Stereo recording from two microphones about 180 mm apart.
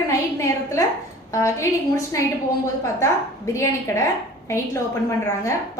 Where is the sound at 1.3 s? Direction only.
15° left (ahead or behind).